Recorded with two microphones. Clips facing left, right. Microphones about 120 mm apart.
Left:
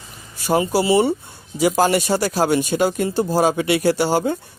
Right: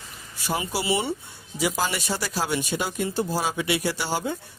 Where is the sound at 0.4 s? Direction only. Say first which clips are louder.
Left 9 dB; 40° left (ahead or behind).